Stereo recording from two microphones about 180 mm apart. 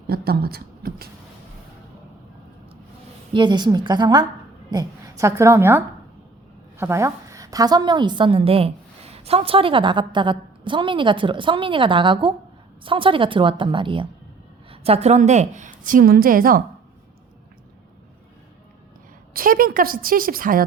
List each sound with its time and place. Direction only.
0.1 s speech: 55° right (ahead or behind)
3.3 s a woman's voice: 25° right (ahead or behind); by 16.6 s 50° right (ahead or behind)
19.3 s a woman's voice: 50° right (ahead or behind)